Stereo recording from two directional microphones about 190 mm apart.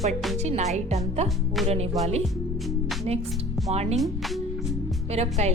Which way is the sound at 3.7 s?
35° right (ahead or behind).